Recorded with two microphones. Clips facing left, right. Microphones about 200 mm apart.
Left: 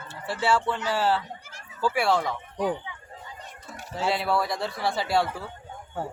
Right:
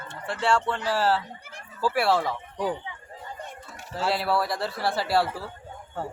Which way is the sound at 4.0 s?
Centre (ahead or behind).